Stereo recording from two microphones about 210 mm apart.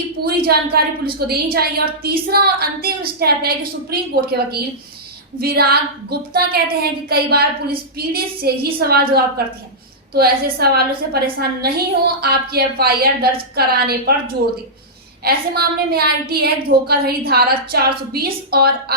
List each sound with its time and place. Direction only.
0.3 s a woman's voice: 50° right (ahead or behind)
15.2 s a woman's voice: 50° right (ahead or behind)